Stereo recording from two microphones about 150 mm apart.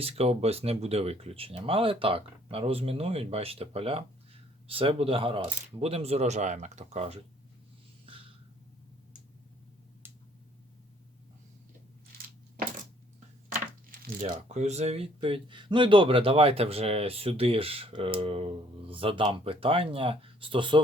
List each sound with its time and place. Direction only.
0.0 s speech: 40° right (ahead or behind)
12.1 s coin: 90° right
14.4 s speech: 50° right (ahead or behind); by 20.8 s 35° right (ahead or behind)